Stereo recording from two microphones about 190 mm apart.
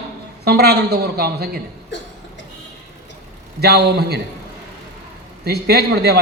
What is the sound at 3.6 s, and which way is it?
Speech, 60° right (ahead or behind).